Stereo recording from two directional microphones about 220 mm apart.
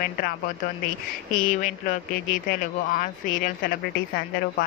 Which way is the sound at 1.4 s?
35° left (ahead or behind).